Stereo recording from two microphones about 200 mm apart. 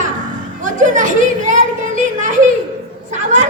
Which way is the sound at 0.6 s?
40° right (ahead or behind).